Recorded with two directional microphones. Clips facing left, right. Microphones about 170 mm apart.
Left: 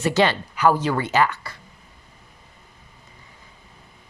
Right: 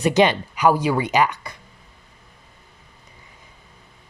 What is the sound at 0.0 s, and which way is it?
Speech, 15° right (ahead or behind).